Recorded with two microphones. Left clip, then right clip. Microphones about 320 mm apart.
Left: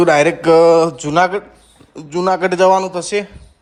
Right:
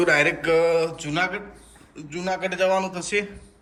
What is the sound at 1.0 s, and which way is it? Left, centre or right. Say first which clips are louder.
A man's voice: left 11 dB; left.